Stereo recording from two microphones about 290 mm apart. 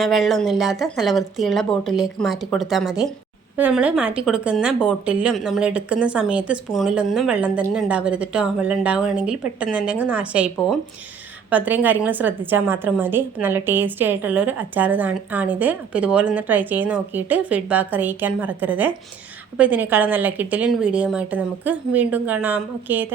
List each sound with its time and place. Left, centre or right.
0.0 s a woman's voice: centre